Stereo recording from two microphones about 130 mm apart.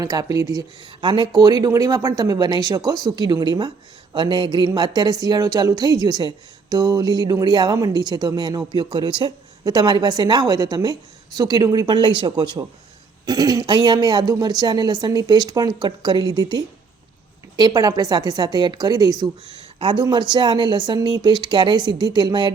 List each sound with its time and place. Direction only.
0.0 s speech: 30° right (ahead or behind)